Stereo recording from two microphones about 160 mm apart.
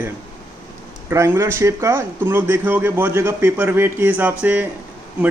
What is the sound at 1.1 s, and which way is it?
Speech, 15° right (ahead or behind).